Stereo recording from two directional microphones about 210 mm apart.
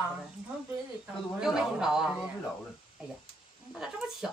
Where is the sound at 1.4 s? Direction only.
Centre (ahead or behind).